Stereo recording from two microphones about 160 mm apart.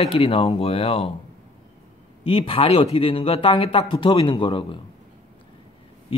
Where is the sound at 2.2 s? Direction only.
35° left (ahead or behind).